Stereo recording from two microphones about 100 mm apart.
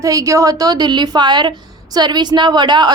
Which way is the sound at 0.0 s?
35° right (ahead or behind).